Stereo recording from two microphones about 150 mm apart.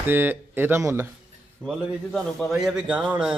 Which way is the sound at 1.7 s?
Centre (ahead or behind).